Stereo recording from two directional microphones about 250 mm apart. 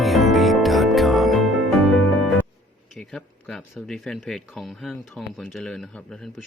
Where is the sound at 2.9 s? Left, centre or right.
Centre.